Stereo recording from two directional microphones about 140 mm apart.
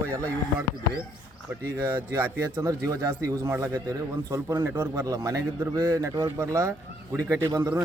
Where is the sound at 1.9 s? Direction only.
20° right (ahead or behind).